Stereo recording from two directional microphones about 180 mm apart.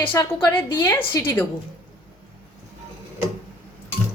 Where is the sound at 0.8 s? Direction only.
15° left (ahead or behind).